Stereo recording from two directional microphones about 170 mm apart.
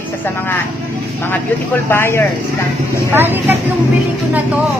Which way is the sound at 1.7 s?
15° left (ahead or behind).